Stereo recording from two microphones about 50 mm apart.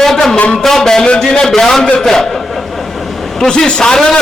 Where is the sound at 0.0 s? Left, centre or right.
Centre.